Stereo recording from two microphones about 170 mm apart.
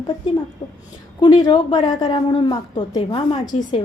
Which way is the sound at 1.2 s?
25° left (ahead or behind).